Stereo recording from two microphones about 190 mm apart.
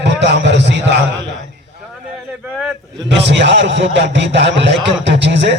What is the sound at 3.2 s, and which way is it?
A man's voice, 65° right (ahead or behind).